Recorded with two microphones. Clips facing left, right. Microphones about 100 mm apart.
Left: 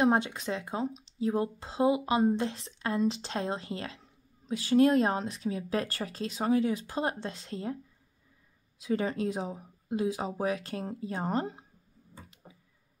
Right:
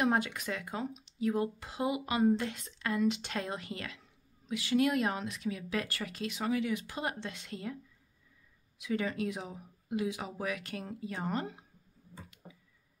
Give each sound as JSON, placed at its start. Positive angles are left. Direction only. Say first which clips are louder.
{"t": 0.0, "sound": "speech", "louder": "left 4 dB", "side_deg": 25}
{"t": 8.7, "sound": "speech", "louder": "left 4 dB", "side_deg": 35}